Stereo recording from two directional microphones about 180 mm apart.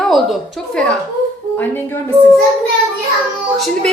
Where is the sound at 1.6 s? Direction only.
10° left (ahead or behind).